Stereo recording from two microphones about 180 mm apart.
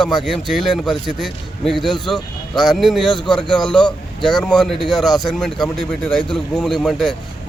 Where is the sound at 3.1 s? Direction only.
25° left (ahead or behind).